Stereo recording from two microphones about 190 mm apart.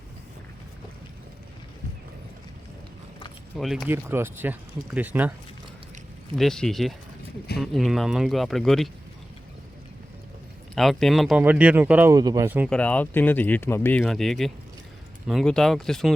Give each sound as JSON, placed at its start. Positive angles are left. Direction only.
{"t": 3.6, "sound": "speech", "side_deg": 0}
{"t": 3.8, "sound": "speech", "side_deg": -10}
{"t": 6.3, "sound": "speech", "side_deg": 0}
{"t": 10.8, "sound": "speech", "side_deg": 0}
{"t": 12.7, "sound": "speech", "side_deg": 5}